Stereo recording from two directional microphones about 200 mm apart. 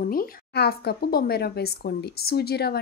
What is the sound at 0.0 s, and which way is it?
Speech, 45° left (ahead or behind).